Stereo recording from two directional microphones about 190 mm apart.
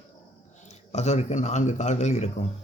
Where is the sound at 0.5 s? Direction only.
40° left (ahead or behind).